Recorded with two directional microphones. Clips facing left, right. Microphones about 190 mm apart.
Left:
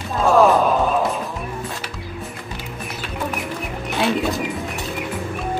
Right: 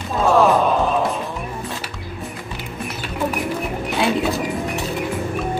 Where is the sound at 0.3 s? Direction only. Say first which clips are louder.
Left 1 dB; centre (ahead or behind).